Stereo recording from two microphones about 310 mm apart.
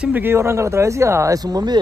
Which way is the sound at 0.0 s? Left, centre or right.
Centre.